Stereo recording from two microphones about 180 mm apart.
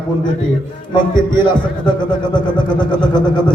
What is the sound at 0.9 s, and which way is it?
A man's voice, 25° left (ahead or behind).